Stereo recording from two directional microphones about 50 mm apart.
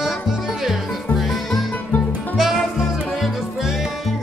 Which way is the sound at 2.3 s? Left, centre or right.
Centre.